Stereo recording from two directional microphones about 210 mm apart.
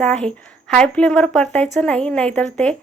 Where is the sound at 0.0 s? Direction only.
5° left (ahead or behind).